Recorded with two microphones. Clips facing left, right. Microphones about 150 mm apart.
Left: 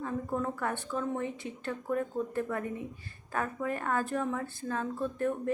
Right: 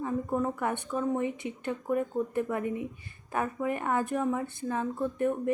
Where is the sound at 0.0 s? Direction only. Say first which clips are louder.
Right 3 dB; 15° right (ahead or behind).